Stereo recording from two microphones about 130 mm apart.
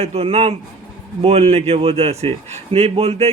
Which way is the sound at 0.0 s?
50° right (ahead or behind).